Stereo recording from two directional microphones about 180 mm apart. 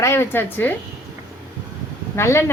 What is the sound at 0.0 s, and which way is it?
Speech, 15° left (ahead or behind).